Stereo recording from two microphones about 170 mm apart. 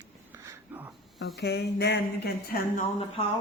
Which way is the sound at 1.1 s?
75° left (ahead or behind).